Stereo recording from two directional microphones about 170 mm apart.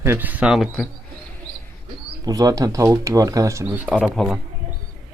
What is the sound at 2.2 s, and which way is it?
Speech, 20° right (ahead or behind).